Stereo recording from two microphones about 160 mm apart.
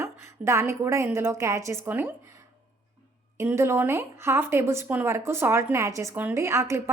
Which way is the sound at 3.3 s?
15° right (ahead or behind).